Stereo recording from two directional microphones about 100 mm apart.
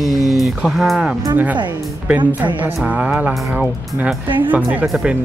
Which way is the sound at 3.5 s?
15° right (ahead or behind).